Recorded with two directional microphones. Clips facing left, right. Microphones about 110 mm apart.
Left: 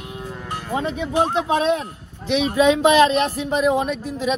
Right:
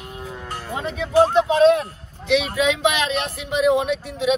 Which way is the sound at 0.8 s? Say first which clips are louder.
Right 3 dB; 30° left (ahead or behind).